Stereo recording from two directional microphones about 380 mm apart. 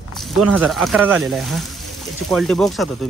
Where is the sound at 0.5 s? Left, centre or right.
Centre.